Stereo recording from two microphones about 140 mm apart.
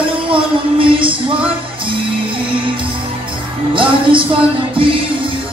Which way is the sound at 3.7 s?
40° right (ahead or behind).